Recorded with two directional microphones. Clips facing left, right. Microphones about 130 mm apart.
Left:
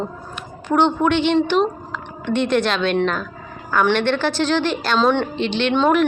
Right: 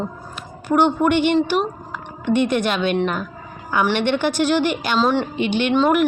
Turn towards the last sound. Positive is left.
turn(degrees=-5)  # may be behind; listen again after turning